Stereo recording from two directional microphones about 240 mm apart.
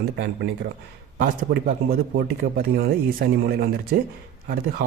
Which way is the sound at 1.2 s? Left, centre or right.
Right.